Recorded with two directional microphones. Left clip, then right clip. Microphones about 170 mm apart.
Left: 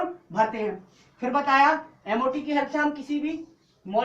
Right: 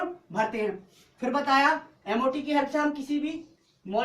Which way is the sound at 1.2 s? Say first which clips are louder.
Left 3 dB; 30° right (ahead or behind).